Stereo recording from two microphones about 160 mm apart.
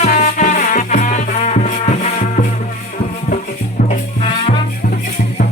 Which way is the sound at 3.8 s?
40° left (ahead or behind).